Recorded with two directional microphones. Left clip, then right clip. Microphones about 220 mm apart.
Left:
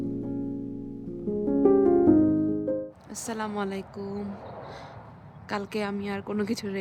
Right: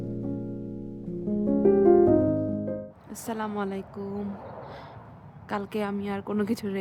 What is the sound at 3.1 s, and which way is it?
A woman's voice, centre (ahead or behind).